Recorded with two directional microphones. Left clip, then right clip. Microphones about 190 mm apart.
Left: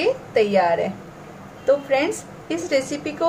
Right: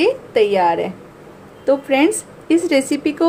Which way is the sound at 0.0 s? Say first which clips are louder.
Right 4 dB; 45° right (ahead or behind).